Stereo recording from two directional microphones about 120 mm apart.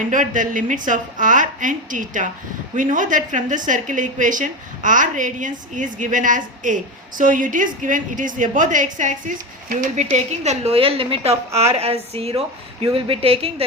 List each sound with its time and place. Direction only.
0.0 s a woman's voice: 90° right; by 13.7 s 55° right (ahead or behind)